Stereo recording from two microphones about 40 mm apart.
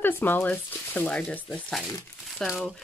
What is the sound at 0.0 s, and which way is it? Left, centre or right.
Speech, left.